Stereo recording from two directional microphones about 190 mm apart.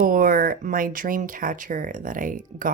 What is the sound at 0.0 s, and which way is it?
Speech, 50° right (ahead or behind).